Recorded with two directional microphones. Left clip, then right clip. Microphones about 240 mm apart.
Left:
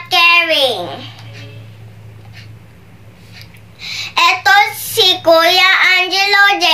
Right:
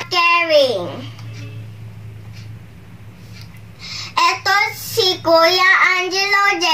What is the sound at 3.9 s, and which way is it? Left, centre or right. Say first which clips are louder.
Child singing: left 4 dB; centre.